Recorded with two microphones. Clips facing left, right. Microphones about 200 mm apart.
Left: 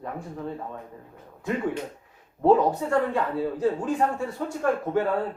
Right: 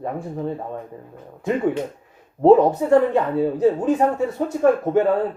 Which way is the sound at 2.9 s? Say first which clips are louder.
Right 8 dB; 20° right (ahead or behind).